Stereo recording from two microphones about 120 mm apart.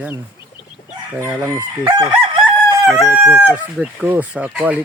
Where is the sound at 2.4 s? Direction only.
5° right (ahead or behind).